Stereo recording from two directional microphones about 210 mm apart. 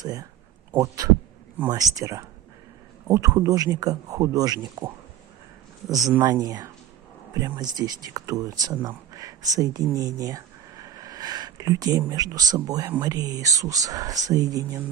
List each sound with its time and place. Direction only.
0.0 s speech: 15° right (ahead or behind)